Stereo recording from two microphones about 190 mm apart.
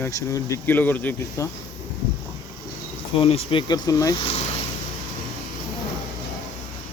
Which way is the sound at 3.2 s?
30° left (ahead or behind).